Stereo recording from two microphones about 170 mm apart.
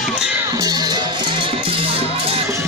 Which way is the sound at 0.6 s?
25° right (ahead or behind).